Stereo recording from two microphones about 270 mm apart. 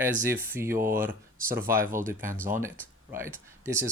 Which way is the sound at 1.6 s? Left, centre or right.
Right.